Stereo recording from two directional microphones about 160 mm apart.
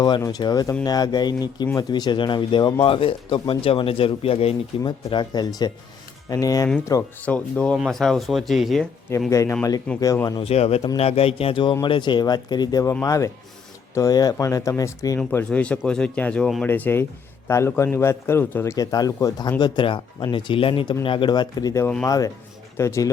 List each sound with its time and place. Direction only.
0.2 s a man's voice: 25° left (ahead or behind)
4.8 s a man's voice: 30° left (ahead or behind)
7.3 s speech: 10° left (ahead or behind)
9.3 s a man's voice: 20° left (ahead or behind)
10.4 s a man's voice: 40° left (ahead or behind); by 23.1 s 20° left (ahead or behind)